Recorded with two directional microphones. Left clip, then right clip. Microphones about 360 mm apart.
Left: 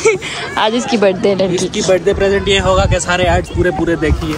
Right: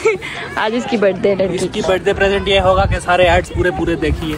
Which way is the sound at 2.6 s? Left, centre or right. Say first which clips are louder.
Left 1 dB; centre.